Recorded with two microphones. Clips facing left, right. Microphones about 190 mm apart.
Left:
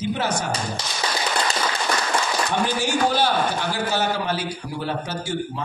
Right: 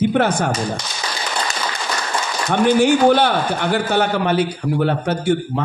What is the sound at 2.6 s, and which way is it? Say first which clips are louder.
A man's voice: right 11 dB; 60° right (ahead or behind).